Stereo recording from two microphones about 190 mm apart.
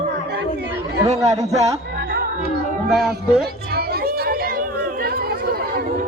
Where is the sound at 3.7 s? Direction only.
55° right (ahead or behind).